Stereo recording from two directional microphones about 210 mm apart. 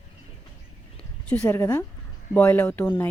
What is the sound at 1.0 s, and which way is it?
Speech, 5° left (ahead or behind).